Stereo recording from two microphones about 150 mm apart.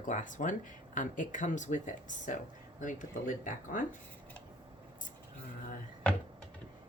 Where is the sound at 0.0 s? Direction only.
55° left (ahead or behind).